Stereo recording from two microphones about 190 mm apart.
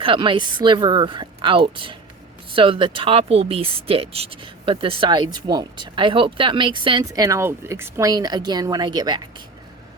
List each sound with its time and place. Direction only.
0.0 s speech: 25° right (ahead or behind)